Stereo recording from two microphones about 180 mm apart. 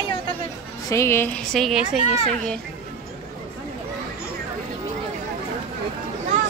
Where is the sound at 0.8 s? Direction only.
15° left (ahead or behind); by 1.9 s centre (ahead or behind).